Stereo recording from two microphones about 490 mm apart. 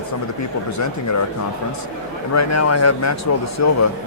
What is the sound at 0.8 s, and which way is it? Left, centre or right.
Speech, left.